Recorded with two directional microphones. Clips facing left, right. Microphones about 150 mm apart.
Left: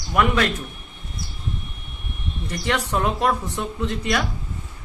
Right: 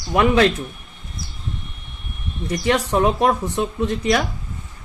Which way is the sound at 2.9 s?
20° right (ahead or behind).